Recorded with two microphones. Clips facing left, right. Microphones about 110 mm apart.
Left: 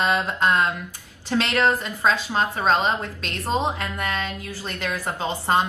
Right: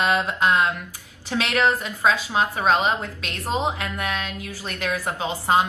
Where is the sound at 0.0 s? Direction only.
Centre (ahead or behind).